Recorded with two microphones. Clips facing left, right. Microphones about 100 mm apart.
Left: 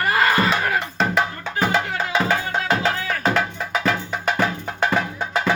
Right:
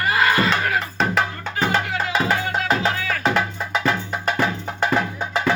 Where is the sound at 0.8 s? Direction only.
Centre (ahead or behind).